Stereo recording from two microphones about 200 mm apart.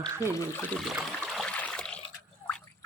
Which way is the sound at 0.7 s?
Centre (ahead or behind).